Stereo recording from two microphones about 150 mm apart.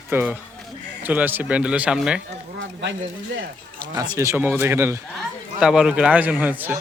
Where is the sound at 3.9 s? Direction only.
25° right (ahead or behind).